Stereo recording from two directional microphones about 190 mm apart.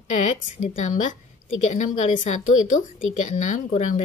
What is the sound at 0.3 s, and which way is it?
A woman's voice, 40° left (ahead or behind).